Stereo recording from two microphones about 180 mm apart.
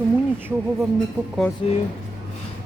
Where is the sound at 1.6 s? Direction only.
30° left (ahead or behind).